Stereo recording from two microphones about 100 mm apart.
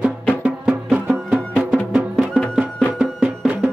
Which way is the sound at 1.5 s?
Centre (ahead or behind).